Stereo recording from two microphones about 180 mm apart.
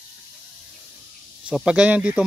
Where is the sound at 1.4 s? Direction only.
5° right (ahead or behind).